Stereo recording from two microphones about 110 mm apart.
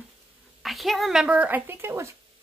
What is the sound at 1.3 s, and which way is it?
Speech, 15° right (ahead or behind).